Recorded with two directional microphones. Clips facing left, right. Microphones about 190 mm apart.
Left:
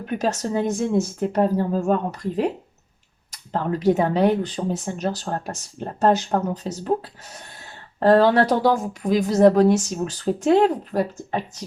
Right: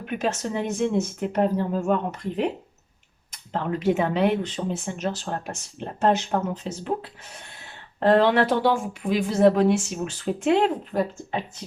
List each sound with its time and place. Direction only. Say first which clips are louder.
0.0 s speech: left 3 dB; 40° left (ahead or behind)